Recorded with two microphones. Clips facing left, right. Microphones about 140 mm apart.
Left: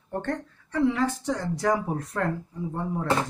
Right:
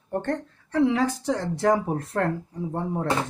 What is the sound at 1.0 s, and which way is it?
Speech, 35° right (ahead or behind).